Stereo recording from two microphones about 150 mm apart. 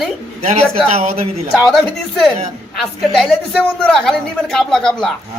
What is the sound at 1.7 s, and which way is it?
A man's voice, centre (ahead or behind).